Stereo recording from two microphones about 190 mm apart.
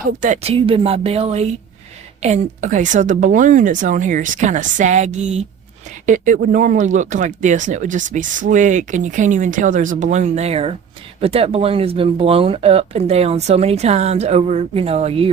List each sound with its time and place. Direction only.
0.0 s speech: 40° right (ahead or behind)